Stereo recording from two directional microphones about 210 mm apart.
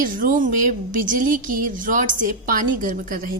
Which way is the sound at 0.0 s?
40° right (ahead or behind).